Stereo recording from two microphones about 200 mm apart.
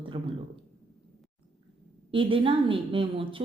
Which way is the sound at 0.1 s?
25° right (ahead or behind).